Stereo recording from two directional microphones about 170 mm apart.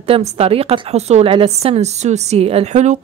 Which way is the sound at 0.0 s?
35° right (ahead or behind).